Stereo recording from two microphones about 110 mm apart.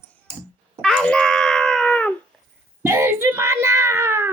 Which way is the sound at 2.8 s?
20° right (ahead or behind).